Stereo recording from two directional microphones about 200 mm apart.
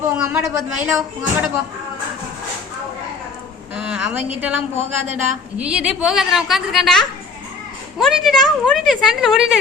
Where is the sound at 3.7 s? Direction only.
5° right (ahead or behind).